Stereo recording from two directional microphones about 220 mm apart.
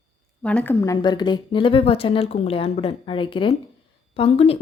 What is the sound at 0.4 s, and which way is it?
A woman's voice, 5° left (ahead or behind).